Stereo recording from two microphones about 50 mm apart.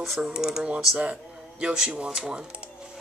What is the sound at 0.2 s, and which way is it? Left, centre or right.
Speech, centre.